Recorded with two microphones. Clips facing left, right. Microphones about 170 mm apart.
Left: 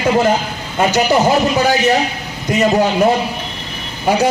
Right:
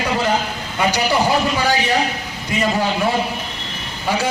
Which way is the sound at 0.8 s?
45° left (ahead or behind).